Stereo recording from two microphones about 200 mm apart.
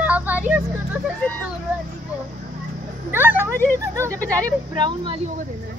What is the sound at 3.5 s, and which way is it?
Speech, 10° left (ahead or behind).